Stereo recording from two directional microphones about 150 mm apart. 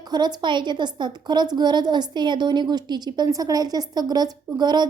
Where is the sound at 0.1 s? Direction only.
30° right (ahead or behind).